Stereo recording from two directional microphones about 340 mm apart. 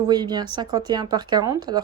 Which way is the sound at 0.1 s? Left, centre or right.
Centre.